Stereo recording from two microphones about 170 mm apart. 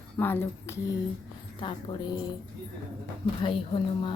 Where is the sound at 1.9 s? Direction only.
25° left (ahead or behind).